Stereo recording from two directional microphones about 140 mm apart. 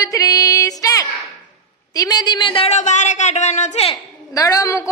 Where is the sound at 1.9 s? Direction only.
25° left (ahead or behind).